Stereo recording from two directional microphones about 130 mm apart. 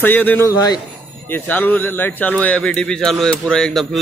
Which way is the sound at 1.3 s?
15° left (ahead or behind).